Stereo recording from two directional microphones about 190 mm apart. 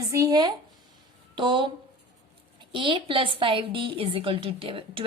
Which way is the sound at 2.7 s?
25° right (ahead or behind).